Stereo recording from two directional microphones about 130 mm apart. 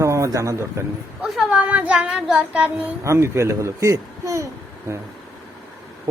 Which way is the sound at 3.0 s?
20° right (ahead or behind).